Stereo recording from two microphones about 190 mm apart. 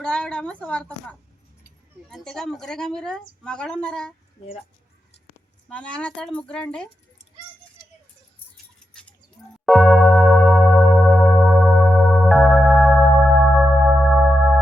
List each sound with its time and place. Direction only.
0.0 s a woman's voice: 5° left (ahead or behind)
2.0 s a woman's voice: 5° left (ahead or behind)
5.6 s a woman's voice: 5° left (ahead or behind)
7.8 s a sound: 50° left (ahead or behind)
9.6 s music: centre (ahead or behind)